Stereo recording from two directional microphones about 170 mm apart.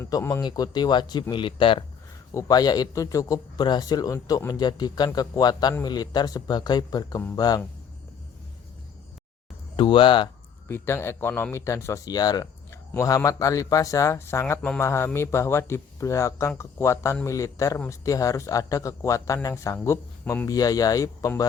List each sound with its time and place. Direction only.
0.0 s a man's voice: 15° left (ahead or behind)
2.3 s a man's voice: 20° left (ahead or behind)
9.7 s a man's voice: 30° left (ahead or behind)
10.7 s a man's voice: 15° left (ahead or behind)